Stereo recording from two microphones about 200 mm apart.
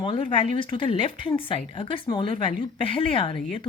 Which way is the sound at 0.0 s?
25° left (ahead or behind).